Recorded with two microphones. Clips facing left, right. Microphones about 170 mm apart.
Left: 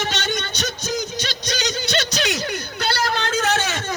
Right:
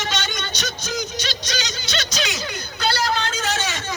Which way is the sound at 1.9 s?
60° left (ahead or behind).